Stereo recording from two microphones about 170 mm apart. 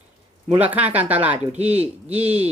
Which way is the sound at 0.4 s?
10° right (ahead or behind).